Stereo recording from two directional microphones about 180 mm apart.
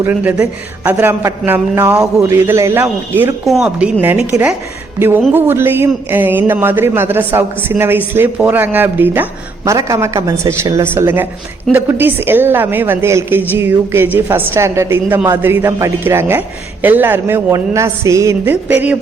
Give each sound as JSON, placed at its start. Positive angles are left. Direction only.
{"t": 0.0, "sound": "a man's voice", "side_deg": -10}